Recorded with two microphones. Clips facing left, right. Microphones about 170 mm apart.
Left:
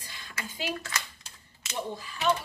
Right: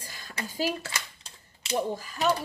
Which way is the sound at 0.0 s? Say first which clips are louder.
Right 3 dB; 40° right (ahead or behind).